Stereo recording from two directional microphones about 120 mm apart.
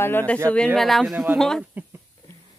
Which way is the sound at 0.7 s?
Centre (ahead or behind).